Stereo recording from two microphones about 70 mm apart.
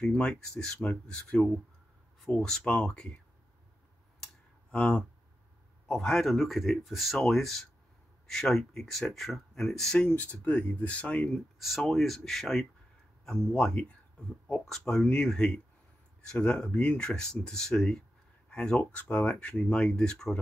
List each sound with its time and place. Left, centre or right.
0.0 s speech: centre
2.3 s speech: centre
4.6 s a man's voice: centre
10.0 s speech: left
11.8 s a man's voice: centre